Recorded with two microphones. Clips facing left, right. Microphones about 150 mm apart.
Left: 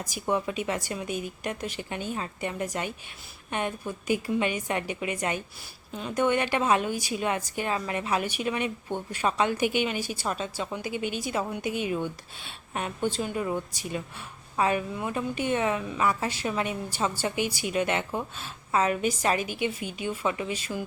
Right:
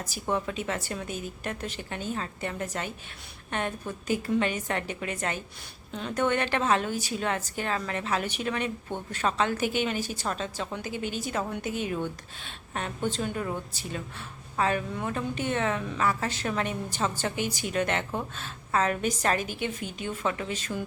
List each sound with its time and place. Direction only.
0.0 s a woman's voice: 10° left (ahead or behind)